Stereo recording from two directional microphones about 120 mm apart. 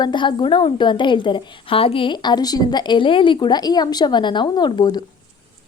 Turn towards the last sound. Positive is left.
turn(degrees=35)  # may be behind; listen again after turning